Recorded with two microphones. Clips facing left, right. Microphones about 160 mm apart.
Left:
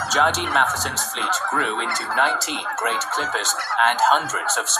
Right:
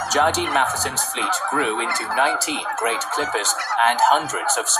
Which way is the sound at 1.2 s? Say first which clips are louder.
Right 2 dB; 10° right (ahead or behind).